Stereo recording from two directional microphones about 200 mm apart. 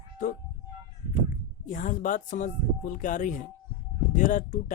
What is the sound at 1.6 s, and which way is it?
Speech, 40° left (ahead or behind).